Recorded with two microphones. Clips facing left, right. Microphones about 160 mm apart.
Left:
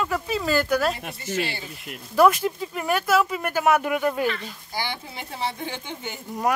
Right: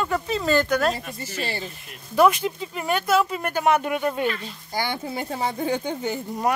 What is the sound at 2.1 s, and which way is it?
Speech, centre (ahead or behind).